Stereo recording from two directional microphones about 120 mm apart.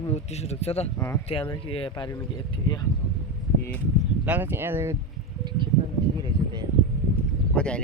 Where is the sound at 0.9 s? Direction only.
20° left (ahead or behind).